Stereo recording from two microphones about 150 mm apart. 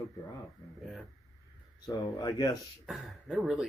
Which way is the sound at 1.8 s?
25° left (ahead or behind).